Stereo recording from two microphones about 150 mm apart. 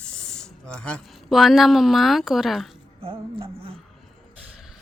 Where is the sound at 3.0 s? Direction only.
40° right (ahead or behind).